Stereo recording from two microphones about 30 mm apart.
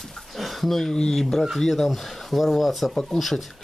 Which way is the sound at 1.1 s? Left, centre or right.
Centre.